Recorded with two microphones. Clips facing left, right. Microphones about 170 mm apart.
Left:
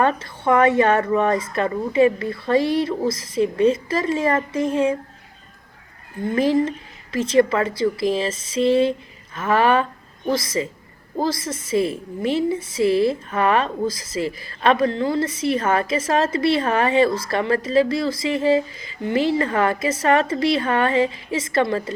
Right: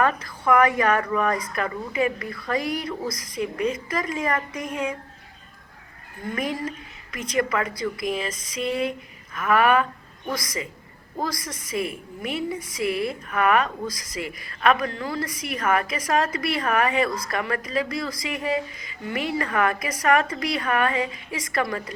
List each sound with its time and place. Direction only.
0.0 s a woman's voice: 25° left (ahead or behind)
6.2 s a woman's voice: 30° left (ahead or behind)